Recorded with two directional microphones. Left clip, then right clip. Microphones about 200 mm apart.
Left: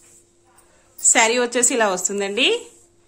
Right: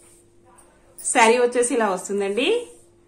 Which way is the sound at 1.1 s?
40° left (ahead or behind).